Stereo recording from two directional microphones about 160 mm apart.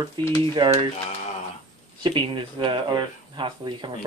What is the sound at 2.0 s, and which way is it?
Speech, 30° right (ahead or behind).